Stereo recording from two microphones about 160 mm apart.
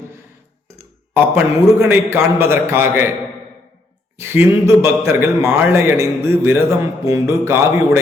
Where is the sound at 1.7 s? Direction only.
15° right (ahead or behind).